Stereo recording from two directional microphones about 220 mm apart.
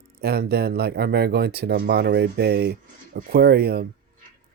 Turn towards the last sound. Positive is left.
turn(degrees=-45)  # may be behind; listen again after turning